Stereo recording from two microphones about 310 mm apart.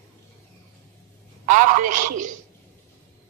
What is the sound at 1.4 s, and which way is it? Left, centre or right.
Speech, right.